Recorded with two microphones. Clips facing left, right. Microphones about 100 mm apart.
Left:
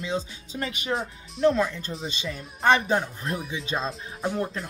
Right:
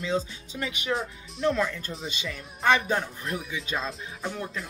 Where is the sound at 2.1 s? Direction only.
30° left (ahead or behind).